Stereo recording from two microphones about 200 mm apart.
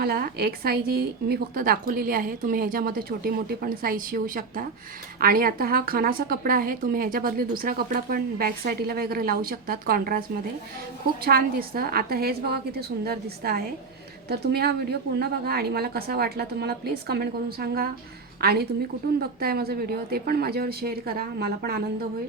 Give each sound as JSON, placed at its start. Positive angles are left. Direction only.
{"t": 0.0, "sound": "a woman's voice", "side_deg": -50}